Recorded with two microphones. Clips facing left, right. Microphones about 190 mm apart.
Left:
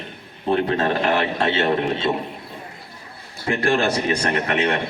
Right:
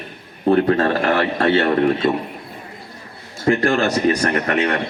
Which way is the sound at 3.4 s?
40° right (ahead or behind).